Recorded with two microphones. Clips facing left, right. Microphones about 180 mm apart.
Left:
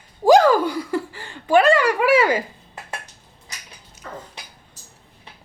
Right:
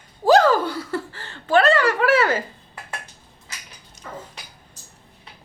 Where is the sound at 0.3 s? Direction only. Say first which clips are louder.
Left 2 dB; 10° left (ahead or behind).